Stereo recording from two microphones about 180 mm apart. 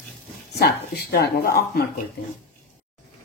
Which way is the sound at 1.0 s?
60° left (ahead or behind).